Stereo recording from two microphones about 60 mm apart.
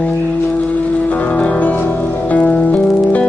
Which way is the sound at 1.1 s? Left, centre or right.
Left.